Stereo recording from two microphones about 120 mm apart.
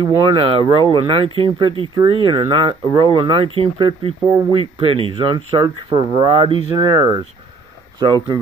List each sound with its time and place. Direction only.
0.0 s speech: 45° right (ahead or behind)
6.9 s speech: 30° right (ahead or behind)